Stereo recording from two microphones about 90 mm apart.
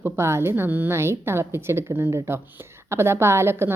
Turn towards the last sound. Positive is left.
turn(degrees=-25)  # may be behind; listen again after turning